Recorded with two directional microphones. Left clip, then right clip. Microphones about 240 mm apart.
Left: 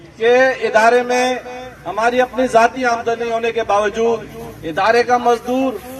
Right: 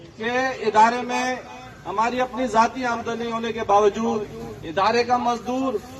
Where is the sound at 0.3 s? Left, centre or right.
Left.